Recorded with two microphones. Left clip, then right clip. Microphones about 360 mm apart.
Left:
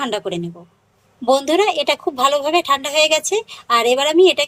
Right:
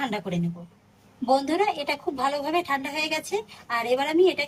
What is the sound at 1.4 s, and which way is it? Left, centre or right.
A woman's voice, centre.